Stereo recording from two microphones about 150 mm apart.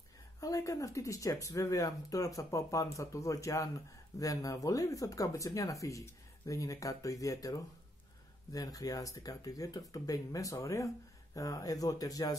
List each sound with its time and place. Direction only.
0.4 s speech: 20° left (ahead or behind)